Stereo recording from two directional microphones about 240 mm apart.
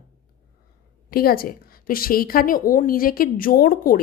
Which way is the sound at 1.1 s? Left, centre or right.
Left.